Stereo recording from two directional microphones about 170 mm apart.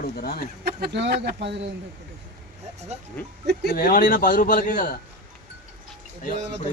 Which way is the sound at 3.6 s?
60° left (ahead or behind).